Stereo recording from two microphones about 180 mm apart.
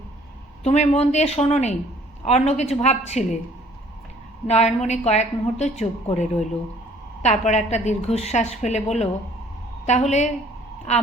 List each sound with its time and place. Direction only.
0.6 s a woman's voice: 40° left (ahead or behind)
4.4 s a woman's voice: 40° left (ahead or behind)